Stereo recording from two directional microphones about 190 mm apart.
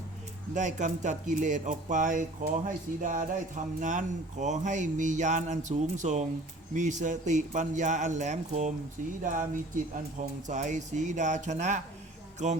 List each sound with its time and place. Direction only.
0.5 s speech: 40° right (ahead or behind)